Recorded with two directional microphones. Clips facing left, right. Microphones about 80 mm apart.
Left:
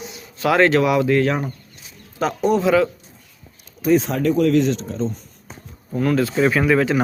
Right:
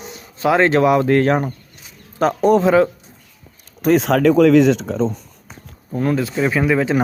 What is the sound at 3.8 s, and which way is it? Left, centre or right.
Speech, right.